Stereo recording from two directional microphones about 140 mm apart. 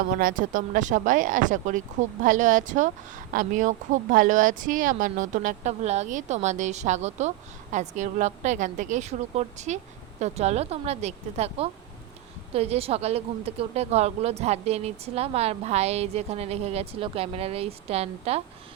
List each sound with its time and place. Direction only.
0.2 s speech: 80° right; by 18.4 s 45° right (ahead or behind)